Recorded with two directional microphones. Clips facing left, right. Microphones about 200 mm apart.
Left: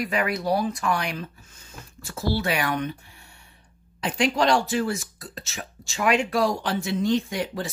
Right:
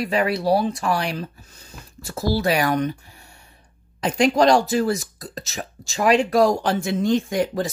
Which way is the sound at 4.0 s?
40° right (ahead or behind).